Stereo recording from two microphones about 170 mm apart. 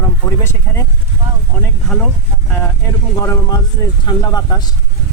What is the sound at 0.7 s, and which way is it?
Speech, 10° left (ahead or behind).